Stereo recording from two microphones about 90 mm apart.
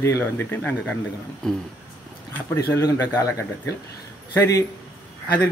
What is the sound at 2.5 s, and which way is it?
A man's voice, 30° left (ahead or behind).